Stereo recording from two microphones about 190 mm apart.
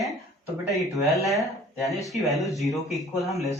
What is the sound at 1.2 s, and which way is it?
Speech, centre (ahead or behind).